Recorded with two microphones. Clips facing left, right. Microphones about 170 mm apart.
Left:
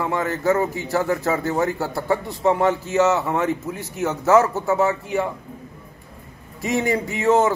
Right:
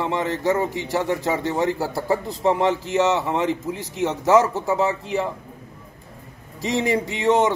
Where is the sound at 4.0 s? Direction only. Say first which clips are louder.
Left 1 dB; 30° right (ahead or behind).